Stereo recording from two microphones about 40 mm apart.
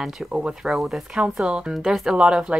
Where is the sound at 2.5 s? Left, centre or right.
Right.